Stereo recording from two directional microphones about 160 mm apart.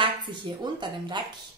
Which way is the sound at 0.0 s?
30° right (ahead or behind).